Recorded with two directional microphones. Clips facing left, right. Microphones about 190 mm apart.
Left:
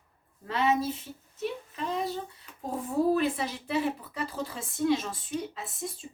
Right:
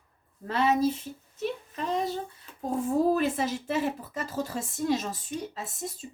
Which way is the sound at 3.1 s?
45° right (ahead or behind).